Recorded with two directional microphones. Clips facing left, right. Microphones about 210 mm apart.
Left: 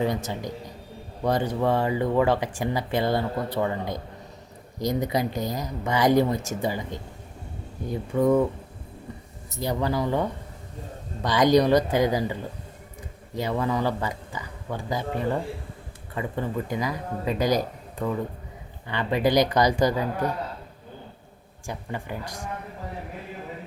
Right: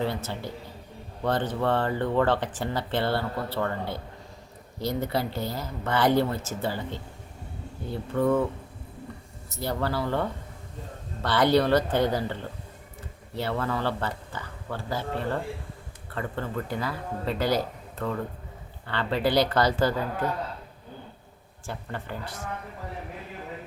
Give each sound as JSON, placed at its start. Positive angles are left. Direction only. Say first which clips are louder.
{"t": 0.0, "sound": "speech", "louder": "left 3 dB", "side_deg": 15}
{"t": 9.6, "sound": "speech", "louder": "left 3 dB", "side_deg": 15}
{"t": 21.7, "sound": "speech", "louder": "left 2 dB", "side_deg": 15}